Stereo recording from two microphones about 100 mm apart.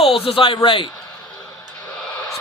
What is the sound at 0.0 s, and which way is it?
Speech, 75° left (ahead or behind).